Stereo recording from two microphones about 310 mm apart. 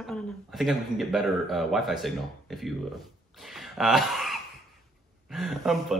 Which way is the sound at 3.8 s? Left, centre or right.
Centre.